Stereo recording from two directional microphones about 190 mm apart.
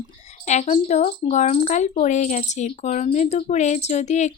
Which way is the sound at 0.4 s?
35° left (ahead or behind).